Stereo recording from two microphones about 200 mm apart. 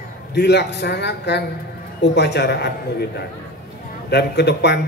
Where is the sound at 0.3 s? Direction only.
55° left (ahead or behind).